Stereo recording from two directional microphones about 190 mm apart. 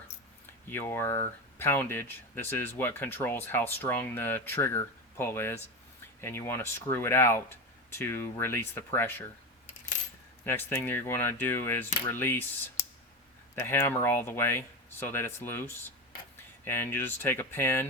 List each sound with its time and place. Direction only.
0.7 s speech: 10° left (ahead or behind)
10.4 s speech: 10° left (ahead or behind)